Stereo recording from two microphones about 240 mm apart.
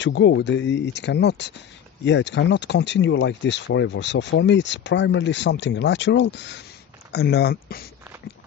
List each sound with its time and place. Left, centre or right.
0.0 s speech: left